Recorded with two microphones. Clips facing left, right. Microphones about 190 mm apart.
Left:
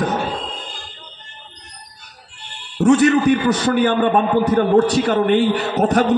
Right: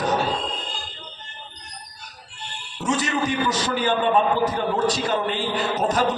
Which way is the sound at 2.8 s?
60° left (ahead or behind).